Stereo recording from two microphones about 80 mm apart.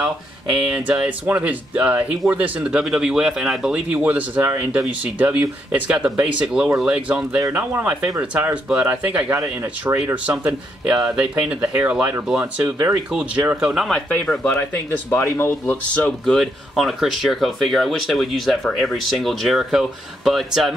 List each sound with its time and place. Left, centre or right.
0.0 s speech: centre
13.1 s speech: centre
13.8 s speech: centre
14.6 s speech: left
15.9 s speech: centre